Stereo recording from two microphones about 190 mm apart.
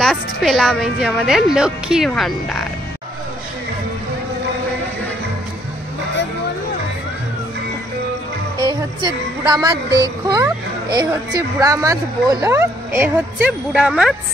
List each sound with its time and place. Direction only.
0.0 s a woman's voice: centre (ahead or behind)
8.6 s a child's voice: 20° right (ahead or behind); by 14.1 s 5° right (ahead or behind)